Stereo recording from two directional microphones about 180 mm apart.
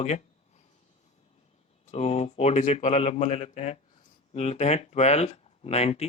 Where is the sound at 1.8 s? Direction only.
35° left (ahead or behind).